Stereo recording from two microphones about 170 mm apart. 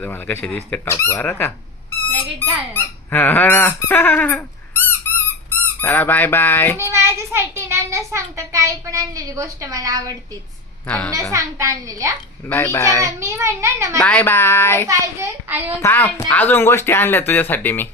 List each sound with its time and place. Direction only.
0.0 s speech: 10° left (ahead or behind)
2.4 s squeak: 10° left (ahead or behind)
5.8 s speech: 10° left (ahead or behind)
6.7 s a child's voice: 15° right (ahead or behind)
10.8 s speech: 10° left (ahead or behind)
11.3 s a woman's voice: 20° right (ahead or behind)
12.5 s speech: 15° left (ahead or behind)
13.0 s a child's voice: 15° right (ahead or behind)
14.0 s speech: 10° left (ahead or behind)
14.8 s a child's voice: 15° right (ahead or behind)
15.8 s speech: 10° left (ahead or behind)